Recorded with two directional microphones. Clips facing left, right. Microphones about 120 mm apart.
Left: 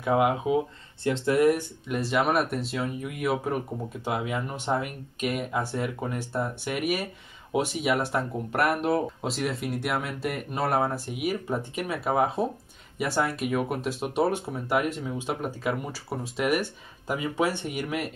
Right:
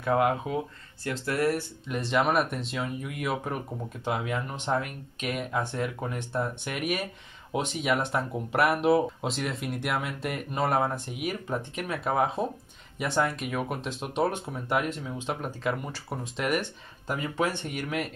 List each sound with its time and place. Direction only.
0.0 s speech: 10° left (ahead or behind)
1.0 s speech: 25° left (ahead or behind)
1.9 s speech: 5° left (ahead or behind)